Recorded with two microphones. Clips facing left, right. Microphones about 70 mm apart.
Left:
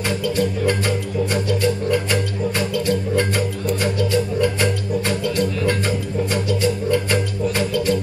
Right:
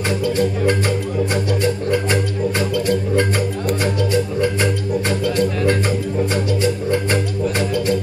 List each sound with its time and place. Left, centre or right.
0.2 s music: right